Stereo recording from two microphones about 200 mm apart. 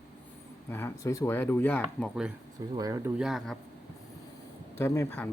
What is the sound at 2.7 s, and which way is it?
Speech, 15° right (ahead or behind).